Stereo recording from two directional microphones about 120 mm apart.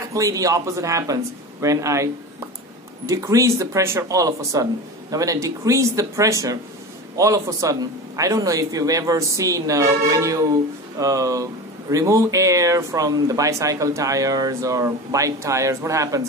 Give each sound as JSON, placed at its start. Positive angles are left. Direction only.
{"t": 0.1, "sound": "speech", "side_deg": -30}
{"t": 3.1, "sound": "speech", "side_deg": -25}